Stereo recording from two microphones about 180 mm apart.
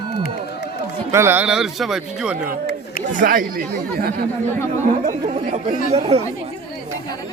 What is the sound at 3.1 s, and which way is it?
Speech, 50° right (ahead or behind).